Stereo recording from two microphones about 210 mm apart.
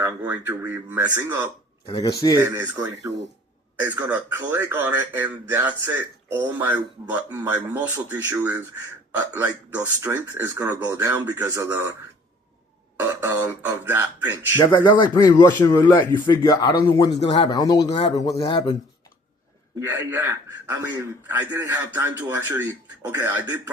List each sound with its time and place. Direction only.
0.0 s a man's voice: 10° right (ahead or behind)
1.9 s speech: 20° left (ahead or behind)
2.4 s a man's voice: 10° right (ahead or behind)
13.0 s a man's voice: 10° right (ahead or behind)
14.6 s speech: 20° left (ahead or behind)
17.2 s speech: 30° left (ahead or behind)
17.5 s speech: 20° left (ahead or behind)
19.8 s a man's voice: 10° right (ahead or behind)